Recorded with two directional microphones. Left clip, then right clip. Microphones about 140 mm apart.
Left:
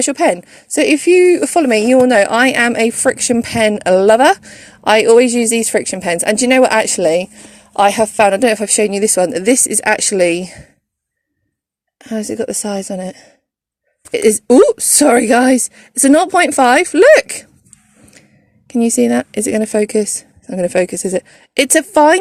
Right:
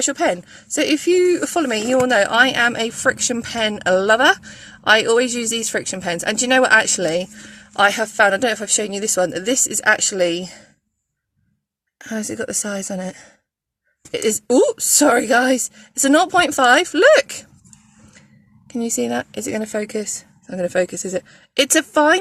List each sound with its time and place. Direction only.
0.1 s a woman's voice: 45° left (ahead or behind)
12.3 s speech: 30° left (ahead or behind)
18.7 s a woman's voice: 45° left (ahead or behind)